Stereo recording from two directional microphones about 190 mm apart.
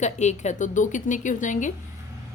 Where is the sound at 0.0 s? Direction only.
40° left (ahead or behind).